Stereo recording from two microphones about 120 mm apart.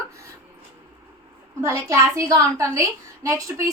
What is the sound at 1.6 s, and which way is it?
A woman's voice, 25° right (ahead or behind).